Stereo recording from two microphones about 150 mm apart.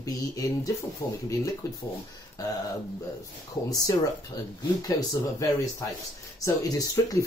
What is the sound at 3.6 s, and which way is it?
Speech, 25° left (ahead or behind).